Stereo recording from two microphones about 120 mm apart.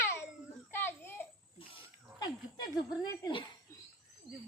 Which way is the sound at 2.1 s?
35° left (ahead or behind).